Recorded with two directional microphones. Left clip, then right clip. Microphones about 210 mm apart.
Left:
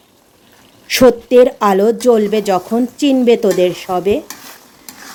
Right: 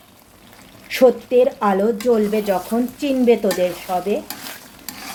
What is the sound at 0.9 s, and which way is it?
Speech, 50° left (ahead or behind).